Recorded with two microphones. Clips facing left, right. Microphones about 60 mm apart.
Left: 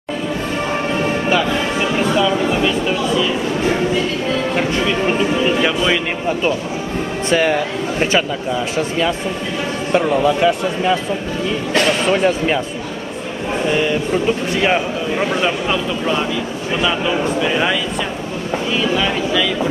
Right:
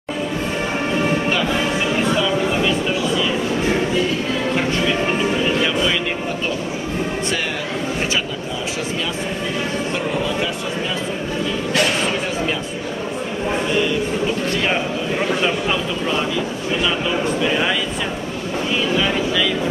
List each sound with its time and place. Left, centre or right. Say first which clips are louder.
9.9 s speech: left 10 dB; left
17.4 s speech: left 2 dB; centre
18.9 s speech: left 1 dB; centre